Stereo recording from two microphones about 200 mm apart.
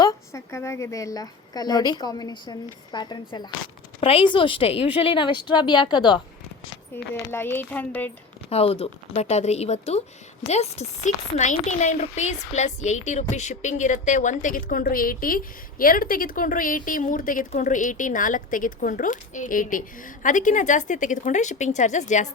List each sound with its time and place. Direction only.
0.0 s a woman's voice: 15° left (ahead or behind)
7.1 s speech: 10° left (ahead or behind)
8.4 s a woman's voice: 30° left (ahead or behind)